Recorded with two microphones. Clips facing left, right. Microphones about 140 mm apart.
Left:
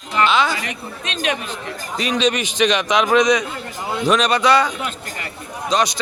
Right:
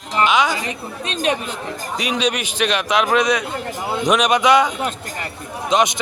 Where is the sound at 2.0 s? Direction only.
10° right (ahead or behind).